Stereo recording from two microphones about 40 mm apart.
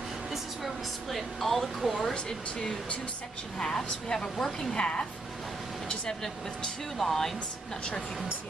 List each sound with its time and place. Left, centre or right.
0.3 s speech: centre
2.1 s speech: centre
4.7 s speech: left
7.0 s speech: centre